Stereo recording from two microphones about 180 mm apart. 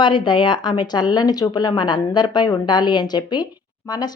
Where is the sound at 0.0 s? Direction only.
25° left (ahead or behind).